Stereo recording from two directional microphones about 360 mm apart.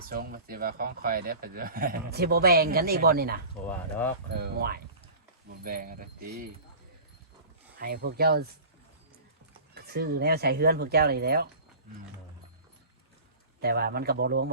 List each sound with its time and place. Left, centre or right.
0.1 s speech: right
3.7 s speech: centre
4.3 s speech: right
7.8 s speech: right
9.7 s speech: right
13.6 s speech: right